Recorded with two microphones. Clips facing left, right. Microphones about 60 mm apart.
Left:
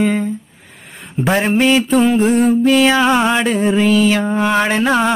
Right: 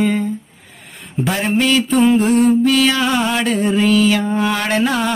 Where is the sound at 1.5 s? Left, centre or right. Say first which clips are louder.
Left 1 dB; left.